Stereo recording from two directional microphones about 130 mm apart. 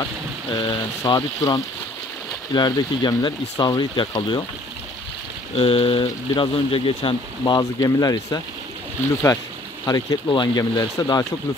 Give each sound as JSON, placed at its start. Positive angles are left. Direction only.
{"t": 0.5, "sound": "speech", "side_deg": 35}
{"t": 5.6, "sound": "speech", "side_deg": 45}
{"t": 9.8, "sound": "speech", "side_deg": 30}